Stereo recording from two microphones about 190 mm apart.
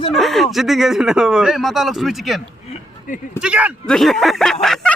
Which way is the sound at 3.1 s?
45° left (ahead or behind).